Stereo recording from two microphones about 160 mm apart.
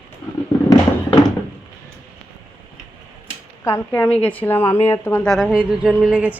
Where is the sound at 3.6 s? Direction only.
15° left (ahead or behind).